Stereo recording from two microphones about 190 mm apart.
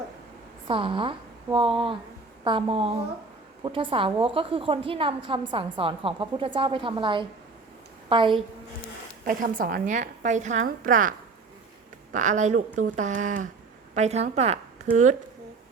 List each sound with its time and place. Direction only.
0.7 s a woman's voice: 25° right (ahead or behind)
9.2 s a woman's voice: 45° right (ahead or behind)
12.1 s a woman's voice: 40° right (ahead or behind)